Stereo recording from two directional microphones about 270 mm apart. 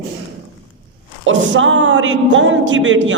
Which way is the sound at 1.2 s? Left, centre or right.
Right.